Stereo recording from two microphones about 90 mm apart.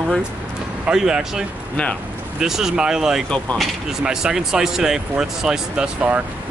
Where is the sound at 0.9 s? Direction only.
10° right (ahead or behind).